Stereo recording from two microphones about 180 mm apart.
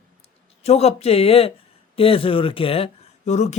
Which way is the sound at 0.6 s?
35° left (ahead or behind).